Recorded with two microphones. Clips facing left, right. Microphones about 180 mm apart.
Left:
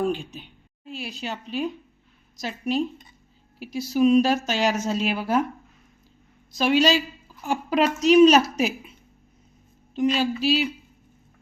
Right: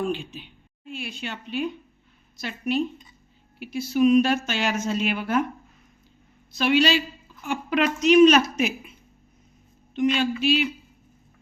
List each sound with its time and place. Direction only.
0.0 s a woman's voice: 40° left (ahead or behind)
6.6 s speech: 40° left (ahead or behind)